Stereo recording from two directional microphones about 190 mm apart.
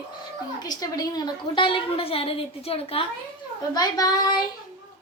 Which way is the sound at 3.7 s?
20° left (ahead or behind).